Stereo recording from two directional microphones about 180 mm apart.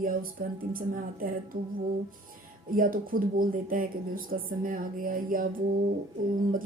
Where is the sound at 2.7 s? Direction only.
50° right (ahead or behind).